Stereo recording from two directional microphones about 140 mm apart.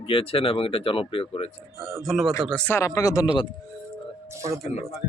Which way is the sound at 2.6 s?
20° left (ahead or behind).